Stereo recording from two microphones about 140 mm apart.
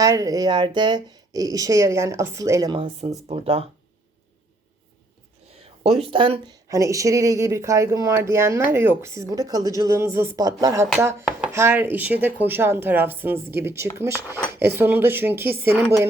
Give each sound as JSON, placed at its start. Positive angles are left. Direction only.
{"t": 0.0, "sound": "speech", "side_deg": -25}
{"t": 2.7, "sound": "speech", "side_deg": -40}
{"t": 5.8, "sound": "speech", "side_deg": -45}
{"t": 11.3, "sound": "chopping", "side_deg": -5}
{"t": 11.5, "sound": "speech", "side_deg": -15}